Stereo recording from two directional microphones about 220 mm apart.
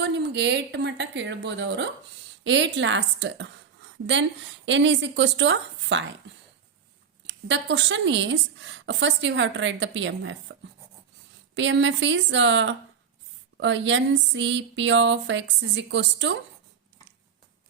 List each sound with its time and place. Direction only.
0.0 s a woman's voice: 50° right (ahead or behind)
7.3 s a woman's voice: 55° right (ahead or behind)